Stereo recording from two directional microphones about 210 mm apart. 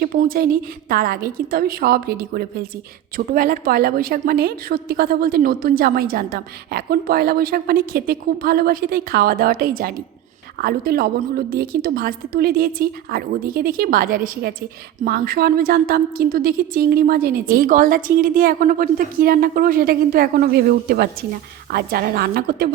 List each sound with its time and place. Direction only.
0.0 s a woman's voice: 45° right (ahead or behind)